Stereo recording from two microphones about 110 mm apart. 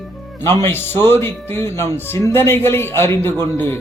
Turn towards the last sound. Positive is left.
turn(degrees=25)  # may be behind; listen again after turning